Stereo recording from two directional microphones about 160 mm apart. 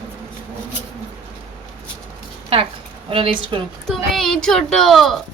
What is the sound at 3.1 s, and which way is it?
Speech, 35° right (ahead or behind).